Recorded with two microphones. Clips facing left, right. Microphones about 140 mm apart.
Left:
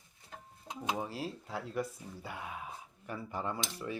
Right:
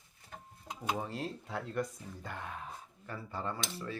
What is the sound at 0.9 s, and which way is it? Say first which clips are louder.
Speech: even; 5° left (ahead or behind).